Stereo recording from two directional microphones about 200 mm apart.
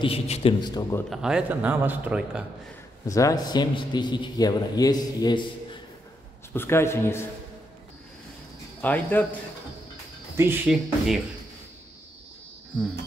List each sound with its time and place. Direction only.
0.0 s a man's voice: 30° left (ahead or behind)
1.1 s speech: 5° right (ahead or behind)
3.1 s a man's voice: 15° left (ahead or behind)
8.8 s a man's voice: 10° left (ahead or behind)
10.3 s speech: 10° right (ahead or behind)